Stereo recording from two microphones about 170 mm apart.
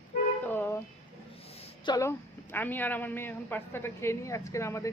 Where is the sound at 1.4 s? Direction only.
35° left (ahead or behind).